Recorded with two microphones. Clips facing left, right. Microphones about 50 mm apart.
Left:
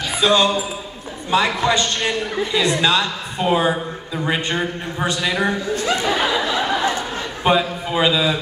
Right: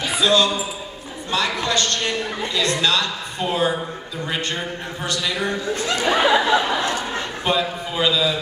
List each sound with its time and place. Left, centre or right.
0.2 s a man's voice: left
6.2 s a sound: centre
7.4 s a man's voice: centre